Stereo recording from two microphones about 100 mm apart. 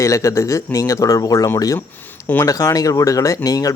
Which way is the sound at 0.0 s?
30° left (ahead or behind).